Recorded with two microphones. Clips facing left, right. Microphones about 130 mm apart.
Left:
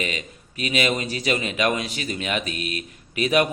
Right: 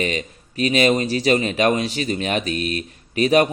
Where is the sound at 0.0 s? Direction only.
35° right (ahead or behind).